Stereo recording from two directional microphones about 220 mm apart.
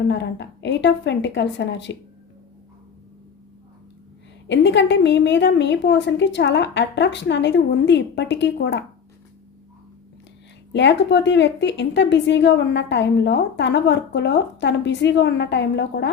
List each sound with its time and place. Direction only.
0.1 s a woman's voice: 50° left (ahead or behind)
4.4 s a woman's voice: 55° left (ahead or behind)
10.7 s a woman's voice: 55° left (ahead or behind)